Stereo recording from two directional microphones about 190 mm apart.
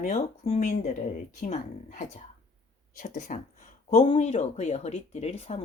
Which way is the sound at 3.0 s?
40° left (ahead or behind).